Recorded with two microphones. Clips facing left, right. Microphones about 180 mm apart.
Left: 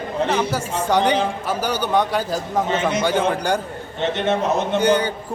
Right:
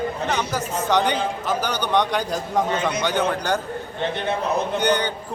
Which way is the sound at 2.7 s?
25° left (ahead or behind).